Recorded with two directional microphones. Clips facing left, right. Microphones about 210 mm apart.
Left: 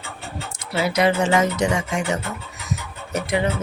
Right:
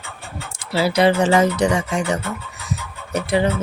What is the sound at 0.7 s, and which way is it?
Speech, 30° right (ahead or behind).